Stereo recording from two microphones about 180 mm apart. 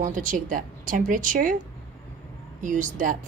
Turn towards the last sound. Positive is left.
turn(degrees=-45)  # may be behind; listen again after turning